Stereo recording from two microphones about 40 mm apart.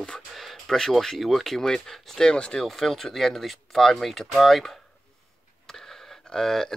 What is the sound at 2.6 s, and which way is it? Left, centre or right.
Speech, centre.